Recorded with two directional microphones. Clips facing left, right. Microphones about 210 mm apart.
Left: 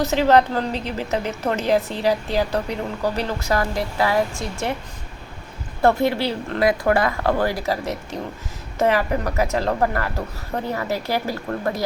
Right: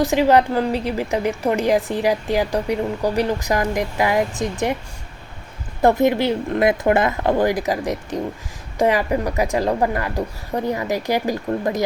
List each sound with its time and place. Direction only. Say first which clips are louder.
0.0 s a woman's voice: right 1 dB; 15° right (ahead or behind)
5.8 s a woman's voice: right 3 dB; 20° right (ahead or behind)